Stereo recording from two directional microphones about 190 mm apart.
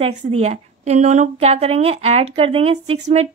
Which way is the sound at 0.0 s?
35° right (ahead or behind).